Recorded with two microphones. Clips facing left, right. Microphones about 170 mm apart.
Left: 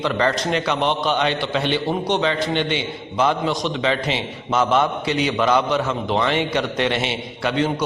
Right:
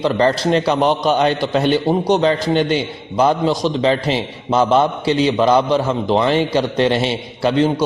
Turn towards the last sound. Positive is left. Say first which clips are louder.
# right 6 dB
turn(degrees=-35)  # may be behind; listen again after turning